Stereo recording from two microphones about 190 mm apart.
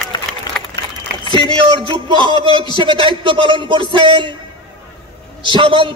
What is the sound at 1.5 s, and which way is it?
Music, 25° right (ahead or behind).